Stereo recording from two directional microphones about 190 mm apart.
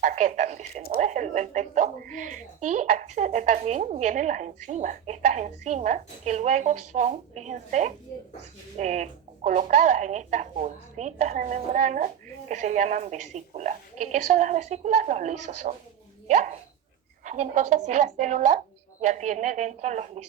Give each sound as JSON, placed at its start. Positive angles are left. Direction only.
{"t": 0.0, "sound": "speech", "side_deg": -40}